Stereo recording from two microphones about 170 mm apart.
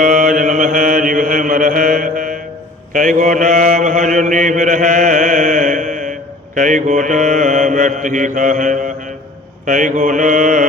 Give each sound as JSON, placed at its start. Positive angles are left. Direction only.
{"t": 0.0, "sound": "mantra", "side_deg": -50}